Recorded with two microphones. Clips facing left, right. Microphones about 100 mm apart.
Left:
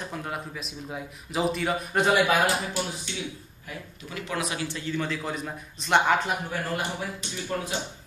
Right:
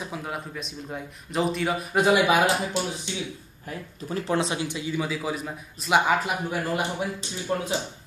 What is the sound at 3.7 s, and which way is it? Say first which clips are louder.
Speech: right 6 dB; 35° right (ahead or behind).